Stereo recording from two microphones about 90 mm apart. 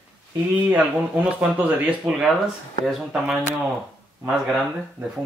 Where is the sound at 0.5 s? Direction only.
15° right (ahead or behind).